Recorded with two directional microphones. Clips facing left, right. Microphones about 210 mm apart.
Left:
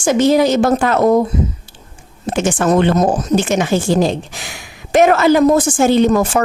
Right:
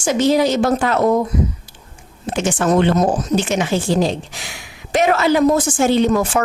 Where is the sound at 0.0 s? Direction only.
50° left (ahead or behind).